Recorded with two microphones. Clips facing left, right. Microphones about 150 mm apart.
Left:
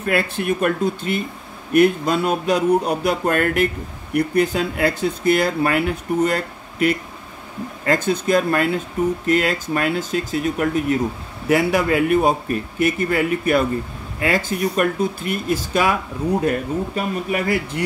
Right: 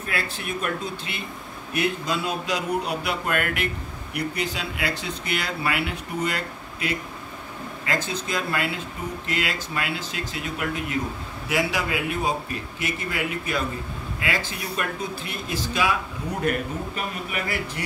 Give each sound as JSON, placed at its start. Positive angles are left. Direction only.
{"t": 0.1, "sound": "speech", "side_deg": 50}
{"t": 16.4, "sound": "speech", "side_deg": 35}